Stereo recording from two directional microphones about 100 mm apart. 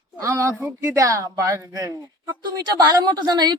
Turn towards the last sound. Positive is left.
turn(degrees=-45)  # may be behind; listen again after turning